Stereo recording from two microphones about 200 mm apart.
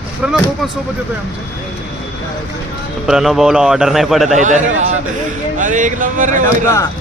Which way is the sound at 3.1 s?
Centre (ahead or behind).